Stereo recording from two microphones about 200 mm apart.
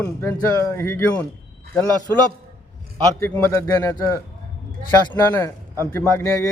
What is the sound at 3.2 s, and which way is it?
Speech, 15° left (ahead or behind).